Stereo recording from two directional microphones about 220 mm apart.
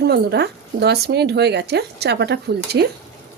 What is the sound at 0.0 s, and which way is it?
Speech, 50° right (ahead or behind).